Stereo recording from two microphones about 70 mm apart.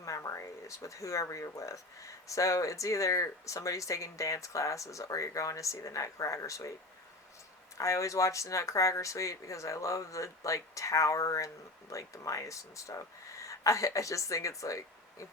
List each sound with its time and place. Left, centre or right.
0.0 s speech: left
7.8 s speech: left